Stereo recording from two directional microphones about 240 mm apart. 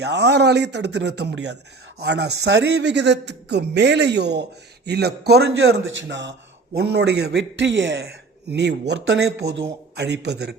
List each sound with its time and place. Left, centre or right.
0.0 s a man's voice: right